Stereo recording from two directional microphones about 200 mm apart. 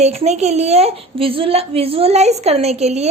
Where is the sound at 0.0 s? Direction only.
35° right (ahead or behind).